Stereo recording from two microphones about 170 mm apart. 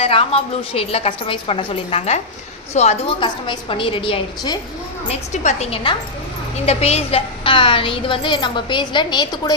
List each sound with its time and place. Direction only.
0.0 s a woman's voice: 35° left (ahead or behind)
5.3 s a woman's voice: 45° left (ahead or behind); by 9.6 s 25° left (ahead or behind)